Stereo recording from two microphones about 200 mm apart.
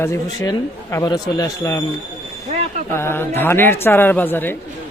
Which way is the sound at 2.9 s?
10° left (ahead or behind).